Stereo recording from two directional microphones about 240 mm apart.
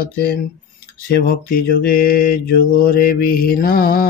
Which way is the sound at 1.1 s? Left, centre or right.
Left.